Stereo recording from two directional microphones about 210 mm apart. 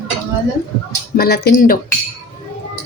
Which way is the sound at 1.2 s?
50° left (ahead or behind).